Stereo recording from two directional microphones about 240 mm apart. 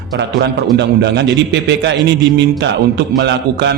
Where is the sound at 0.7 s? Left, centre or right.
Right.